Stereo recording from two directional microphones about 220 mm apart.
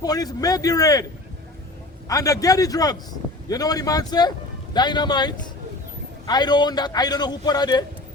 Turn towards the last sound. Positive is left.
turn(degrees=20)  # may be behind; listen again after turning